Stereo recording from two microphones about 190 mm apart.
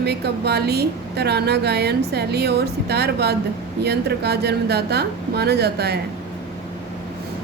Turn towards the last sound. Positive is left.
turn(degrees=-60)  # may be behind; listen again after turning